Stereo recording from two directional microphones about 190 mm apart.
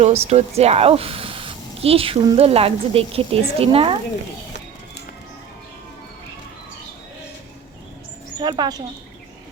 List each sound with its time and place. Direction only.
0.0 s speech: 35° right (ahead or behind)
8.4 s speech: 20° right (ahead or behind)